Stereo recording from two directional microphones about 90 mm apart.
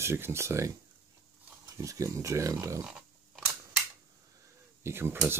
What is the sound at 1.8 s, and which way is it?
Cutlery, 35° right (ahead or behind).